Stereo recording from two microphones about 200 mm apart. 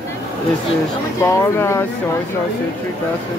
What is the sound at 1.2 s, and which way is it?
Speech, 15° left (ahead or behind).